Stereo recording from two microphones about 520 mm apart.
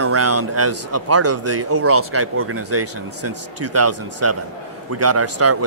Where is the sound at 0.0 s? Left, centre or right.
Right.